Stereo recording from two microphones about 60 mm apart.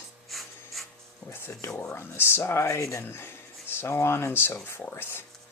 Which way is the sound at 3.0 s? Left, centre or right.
Left.